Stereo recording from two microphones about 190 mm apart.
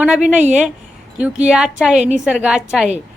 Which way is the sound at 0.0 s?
5° right (ahead or behind).